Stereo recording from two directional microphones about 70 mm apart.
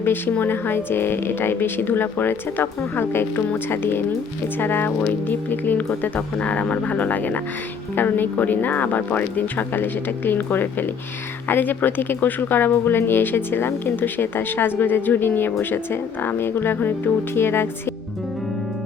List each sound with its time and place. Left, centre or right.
0.0 s speech: left